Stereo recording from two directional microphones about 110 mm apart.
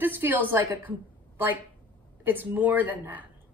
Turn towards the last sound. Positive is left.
turn(degrees=-15)  # may be behind; listen again after turning